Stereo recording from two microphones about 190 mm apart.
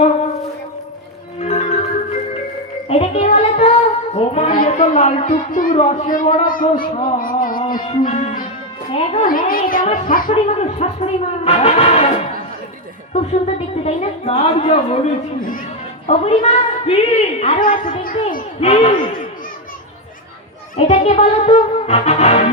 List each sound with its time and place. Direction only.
1.4 s music: 35° left (ahead or behind)
2.9 s a sound: 35° left (ahead or behind)
4.5 s speech: 45° left (ahead or behind)
5.8 s a woman's voice: 35° left (ahead or behind)
6.1 s speech: 45° left (ahead or behind)
7.2 s music: 45° left (ahead or behind)
7.9 s a woman's voice: 35° left (ahead or behind)
9.2 s a woman's voice: 45° left (ahead or behind)
15.4 s speech: 45° left (ahead or behind)
16.0 s a woman's voice: 35° left (ahead or behind)
20.7 s a woman's voice: 35° left (ahead or behind)